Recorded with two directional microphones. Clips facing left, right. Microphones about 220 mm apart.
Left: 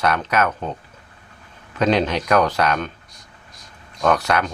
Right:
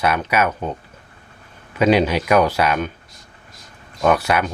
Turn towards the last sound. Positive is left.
turn(degrees=-10)  # may be behind; listen again after turning